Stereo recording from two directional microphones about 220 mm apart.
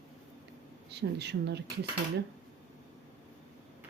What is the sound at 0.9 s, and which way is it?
Speech, 50° right (ahead or behind).